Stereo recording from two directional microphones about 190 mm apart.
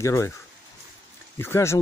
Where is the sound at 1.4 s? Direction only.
15° left (ahead or behind).